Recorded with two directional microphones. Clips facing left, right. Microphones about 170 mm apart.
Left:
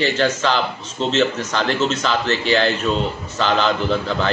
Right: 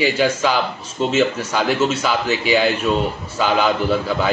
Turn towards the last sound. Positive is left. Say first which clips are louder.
# right 2 dB
turn(degrees=-10)  # may be behind; listen again after turning